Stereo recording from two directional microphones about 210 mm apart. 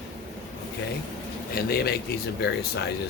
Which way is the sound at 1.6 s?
50° left (ahead or behind).